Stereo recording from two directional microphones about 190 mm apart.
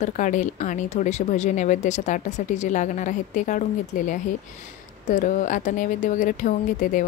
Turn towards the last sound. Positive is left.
turn(degrees=45)  # may be behind; listen again after turning